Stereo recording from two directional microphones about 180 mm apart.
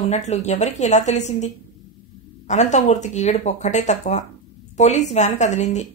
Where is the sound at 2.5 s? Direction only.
40° left (ahead or behind).